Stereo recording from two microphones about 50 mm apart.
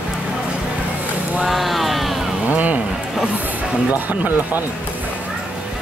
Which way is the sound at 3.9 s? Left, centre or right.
Right.